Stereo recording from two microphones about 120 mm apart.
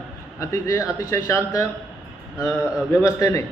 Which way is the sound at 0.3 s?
25° left (ahead or behind).